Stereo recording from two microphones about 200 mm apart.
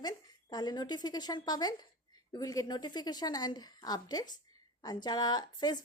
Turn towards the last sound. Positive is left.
turn(degrees=20)  # may be behind; listen again after turning